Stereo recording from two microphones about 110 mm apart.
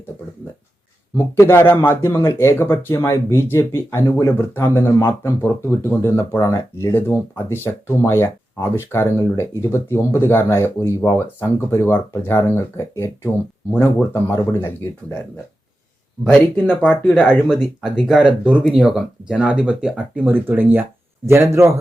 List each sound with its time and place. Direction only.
1.1 s speech: 25° left (ahead or behind)
16.2 s a man's voice: 10° left (ahead or behind); by 21.7 s 25° right (ahead or behind)